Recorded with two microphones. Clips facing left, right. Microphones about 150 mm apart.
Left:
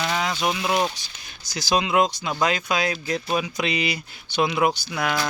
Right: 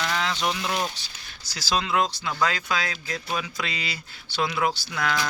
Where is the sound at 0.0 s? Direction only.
15° left (ahead or behind).